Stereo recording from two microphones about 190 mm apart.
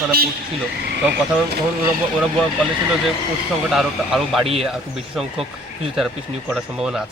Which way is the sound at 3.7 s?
Centre (ahead or behind).